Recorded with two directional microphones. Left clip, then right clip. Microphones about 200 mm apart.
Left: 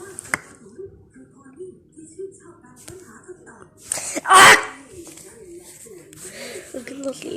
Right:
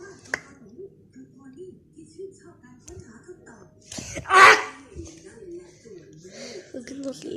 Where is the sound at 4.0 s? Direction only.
20° left (ahead or behind).